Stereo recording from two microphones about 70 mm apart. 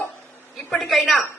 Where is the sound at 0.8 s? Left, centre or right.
Centre.